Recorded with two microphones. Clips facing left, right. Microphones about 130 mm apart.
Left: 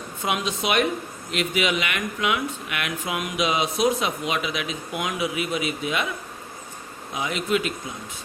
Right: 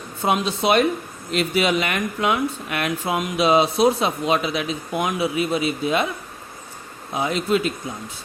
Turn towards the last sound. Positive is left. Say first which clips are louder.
# right 4 dB
turn(degrees=-35)  # may be behind; listen again after turning